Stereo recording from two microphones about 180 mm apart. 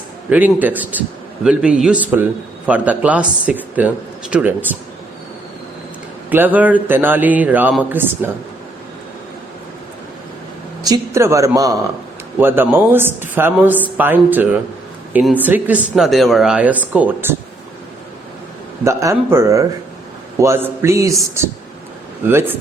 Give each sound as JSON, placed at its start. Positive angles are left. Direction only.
{"t": 0.3, "sound": "a man's voice", "side_deg": -10}
{"t": 6.3, "sound": "speech", "side_deg": -10}
{"t": 10.8, "sound": "speech", "side_deg": -20}
{"t": 18.9, "sound": "speech", "side_deg": -15}
{"t": 22.3, "sound": "speech", "side_deg": -15}